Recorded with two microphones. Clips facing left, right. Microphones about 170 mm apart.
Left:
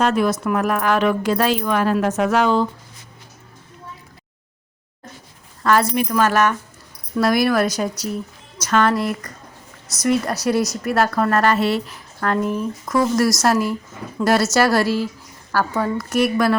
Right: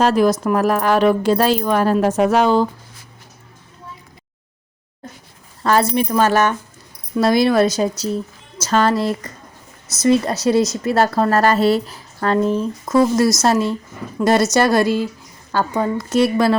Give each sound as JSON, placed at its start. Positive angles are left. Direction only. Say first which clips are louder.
{"t": 0.0, "sound": "a woman's voice", "louder": "right 3 dB", "side_deg": -35}
{"t": 5.6, "sound": "a woman's voice", "louder": "right 1 dB", "side_deg": -30}